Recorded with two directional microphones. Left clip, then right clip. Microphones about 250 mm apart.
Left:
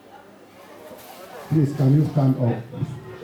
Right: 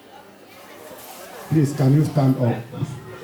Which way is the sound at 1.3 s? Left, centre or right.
Centre.